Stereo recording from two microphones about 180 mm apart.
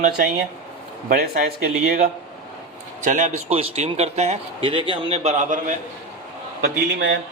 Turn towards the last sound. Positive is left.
turn(degrees=-75)  # may be behind; listen again after turning